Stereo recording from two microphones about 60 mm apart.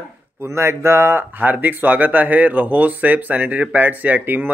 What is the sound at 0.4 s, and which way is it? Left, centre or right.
Speech, right.